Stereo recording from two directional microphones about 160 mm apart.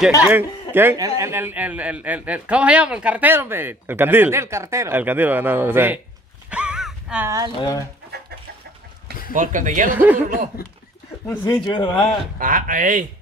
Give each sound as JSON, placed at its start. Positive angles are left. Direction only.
{"t": 0.2, "sound": "a man's voice", "side_deg": -10}
{"t": 6.5, "sound": "a sound", "side_deg": -5}
{"t": 7.2, "sound": "speech", "side_deg": -20}
{"t": 9.3, "sound": "speech", "side_deg": -55}
{"t": 9.9, "sound": "a man's voice", "side_deg": -10}
{"t": 11.2, "sound": "speech", "side_deg": 25}
{"t": 12.4, "sound": "speech", "side_deg": -55}